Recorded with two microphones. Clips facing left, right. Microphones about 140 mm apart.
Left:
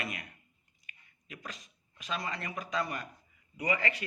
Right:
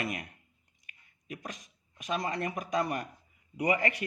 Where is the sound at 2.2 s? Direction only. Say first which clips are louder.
Right 6 dB; 50° right (ahead or behind).